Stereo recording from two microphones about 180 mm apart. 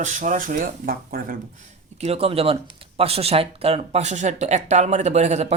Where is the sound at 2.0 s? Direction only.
35° right (ahead or behind).